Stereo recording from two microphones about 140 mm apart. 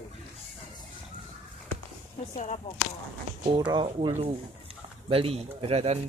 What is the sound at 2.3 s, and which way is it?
Speech, 55° left (ahead or behind).